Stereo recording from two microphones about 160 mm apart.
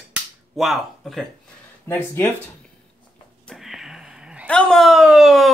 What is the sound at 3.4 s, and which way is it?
Sniff, centre (ahead or behind).